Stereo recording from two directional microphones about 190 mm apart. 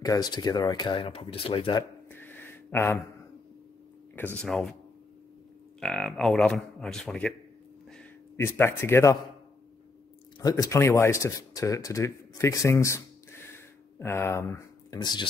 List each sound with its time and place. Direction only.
0.0 s speech: 20° left (ahead or behind)
2.0 s a sound: 10° left (ahead or behind)
4.4 s speech: centre (ahead or behind)
5.8 s a man's voice: centre (ahead or behind)
10.4 s speech: 15° left (ahead or behind)